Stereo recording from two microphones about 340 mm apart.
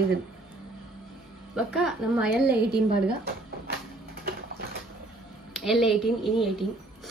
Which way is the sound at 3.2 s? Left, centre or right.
Right.